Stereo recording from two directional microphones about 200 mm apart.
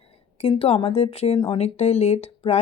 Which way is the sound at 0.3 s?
30° left (ahead or behind).